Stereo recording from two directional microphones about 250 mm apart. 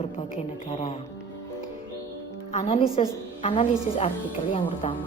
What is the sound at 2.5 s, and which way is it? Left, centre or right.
A woman's voice, left.